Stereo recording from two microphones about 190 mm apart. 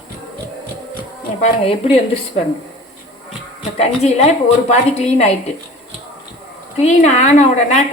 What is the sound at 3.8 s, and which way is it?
A woman's voice, 35° left (ahead or behind).